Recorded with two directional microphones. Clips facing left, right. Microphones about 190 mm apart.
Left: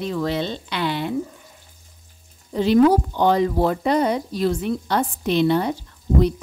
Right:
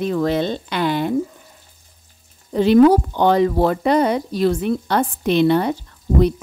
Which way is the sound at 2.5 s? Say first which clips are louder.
Right 4 dB; 60° right (ahead or behind).